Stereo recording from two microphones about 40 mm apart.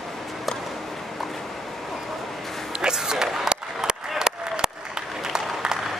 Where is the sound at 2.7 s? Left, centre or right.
Centre.